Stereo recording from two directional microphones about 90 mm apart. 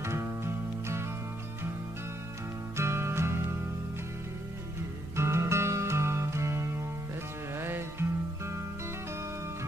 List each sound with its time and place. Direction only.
0.0 s music: 30° right (ahead or behind)
2.8 s music: 30° right (ahead or behind)
5.1 s music: 30° right (ahead or behind)